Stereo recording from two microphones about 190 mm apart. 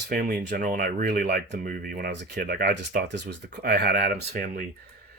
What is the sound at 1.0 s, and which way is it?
Speech, 55° right (ahead or behind).